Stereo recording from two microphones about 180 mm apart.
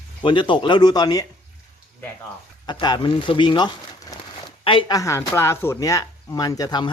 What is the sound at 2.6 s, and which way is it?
A man's voice, 25° left (ahead or behind).